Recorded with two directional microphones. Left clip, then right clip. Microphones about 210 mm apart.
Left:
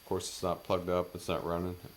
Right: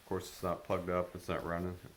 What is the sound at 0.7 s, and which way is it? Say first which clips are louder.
Speech: left 4 dB; 45° left (ahead or behind).